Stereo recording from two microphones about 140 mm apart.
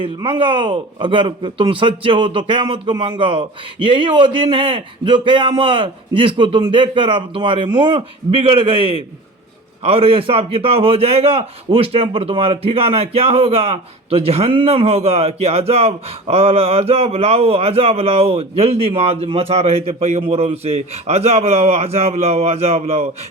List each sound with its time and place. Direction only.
0.0 s a man's voice: 35° right (ahead or behind)